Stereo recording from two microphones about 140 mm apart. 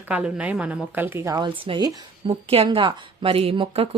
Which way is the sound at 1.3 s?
35° right (ahead or behind).